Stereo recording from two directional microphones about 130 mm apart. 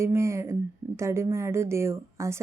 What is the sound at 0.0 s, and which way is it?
A woman's voice, 20° right (ahead or behind).